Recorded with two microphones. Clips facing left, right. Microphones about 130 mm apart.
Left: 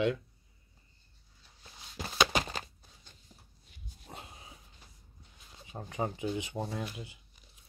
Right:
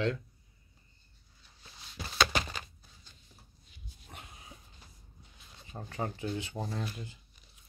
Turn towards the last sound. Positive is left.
turn(degrees=10)  # may be behind; listen again after turning